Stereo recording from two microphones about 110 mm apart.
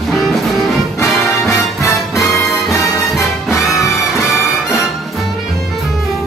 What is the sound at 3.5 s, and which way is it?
Music, 30° left (ahead or behind).